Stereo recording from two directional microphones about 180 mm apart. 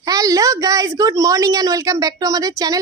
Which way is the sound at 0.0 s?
20° right (ahead or behind).